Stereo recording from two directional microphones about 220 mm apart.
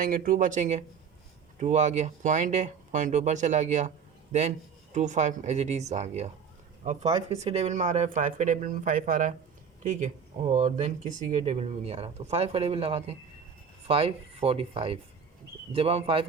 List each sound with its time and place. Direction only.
0.0 s speech: 40° right (ahead or behind)
10.5 s speech: 30° right (ahead or behind)